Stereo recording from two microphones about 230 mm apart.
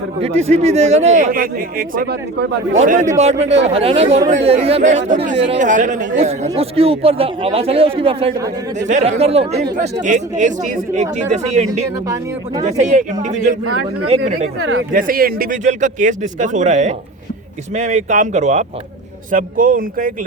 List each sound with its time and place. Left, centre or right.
0.2 s speech: right
2.8 s speech: right
12.0 s speech: centre
12.8 s speech: right
14.6 s speech: right
14.9 s speech: right